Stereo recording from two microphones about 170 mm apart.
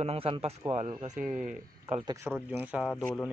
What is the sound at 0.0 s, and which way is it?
A man's voice, 35° right (ahead or behind).